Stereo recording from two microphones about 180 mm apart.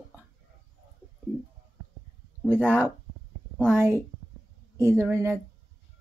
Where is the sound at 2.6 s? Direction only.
10° right (ahead or behind).